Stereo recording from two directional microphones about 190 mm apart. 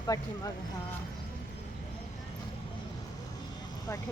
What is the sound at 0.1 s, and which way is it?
Speech, 20° left (ahead or behind).